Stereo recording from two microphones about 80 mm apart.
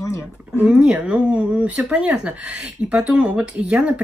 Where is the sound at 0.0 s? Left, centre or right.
Left.